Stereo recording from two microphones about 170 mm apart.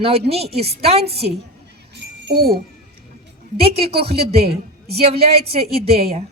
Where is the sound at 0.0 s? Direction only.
35° right (ahead or behind).